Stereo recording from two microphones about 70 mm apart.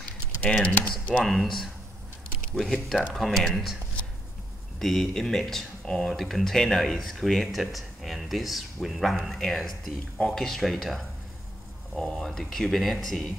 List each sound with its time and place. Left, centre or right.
0.4 s speech: centre
1.2 s speech: centre
4.7 s speech: centre